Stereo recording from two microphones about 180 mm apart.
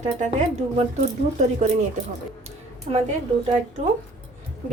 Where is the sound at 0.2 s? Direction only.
40° right (ahead or behind).